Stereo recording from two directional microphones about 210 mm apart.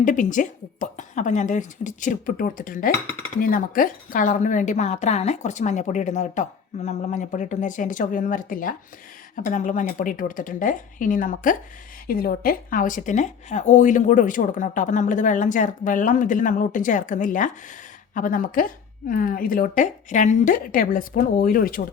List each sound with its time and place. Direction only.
0.0 s a woman's voice: 35° left (ahead or behind)